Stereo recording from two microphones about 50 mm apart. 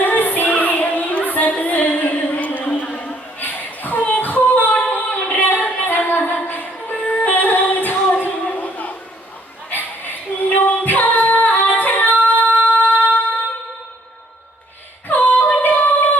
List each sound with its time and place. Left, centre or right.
0.0 s music: left
3.4 s a capella: left
6.9 s music: left
7.2 s music: left
8.1 s a sound: left
10.6 s female singing: left
15.0 s yodeling: left